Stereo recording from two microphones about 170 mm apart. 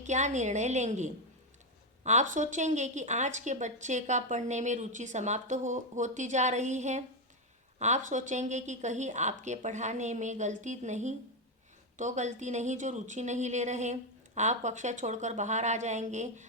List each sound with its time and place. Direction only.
0.0 s speech: 45° right (ahead or behind)